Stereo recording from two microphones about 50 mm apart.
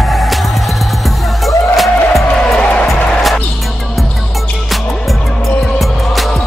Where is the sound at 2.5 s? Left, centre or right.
Left.